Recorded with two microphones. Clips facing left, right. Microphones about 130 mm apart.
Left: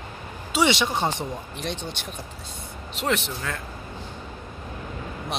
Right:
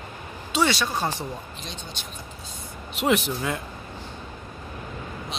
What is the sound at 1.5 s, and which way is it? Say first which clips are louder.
Speech: left 6 dB; 65° left (ahead or behind).